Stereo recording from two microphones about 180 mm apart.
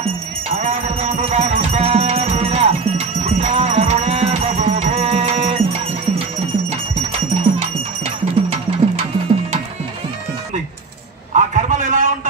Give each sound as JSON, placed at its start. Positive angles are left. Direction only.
{"t": 0.6, "sound": "music", "side_deg": -40}
{"t": 7.5, "sound": "music", "side_deg": -25}
{"t": 8.0, "sound": "music", "side_deg": -35}
{"t": 11.3, "sound": "a sound", "side_deg": -45}